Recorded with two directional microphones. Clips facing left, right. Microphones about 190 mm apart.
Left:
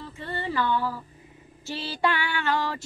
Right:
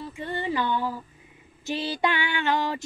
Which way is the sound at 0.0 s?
15° right (ahead or behind).